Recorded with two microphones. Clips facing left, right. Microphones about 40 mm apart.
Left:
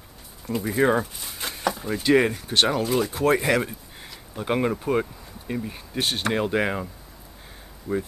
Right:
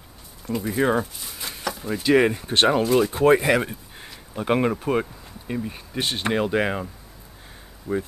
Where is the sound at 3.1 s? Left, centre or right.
Right.